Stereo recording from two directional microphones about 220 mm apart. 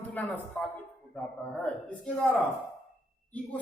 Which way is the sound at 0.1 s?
5° left (ahead or behind).